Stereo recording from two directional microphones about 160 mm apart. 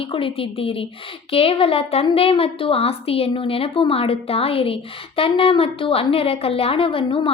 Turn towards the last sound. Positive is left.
turn(degrees=35)  # may be behind; listen again after turning